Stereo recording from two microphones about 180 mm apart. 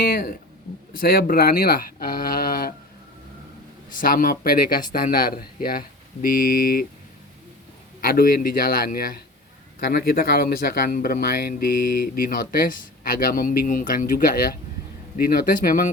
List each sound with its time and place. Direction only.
0.0 s speech: 55° left (ahead or behind)
4.0 s speech: 55° left (ahead or behind)
8.0 s speech: 55° left (ahead or behind)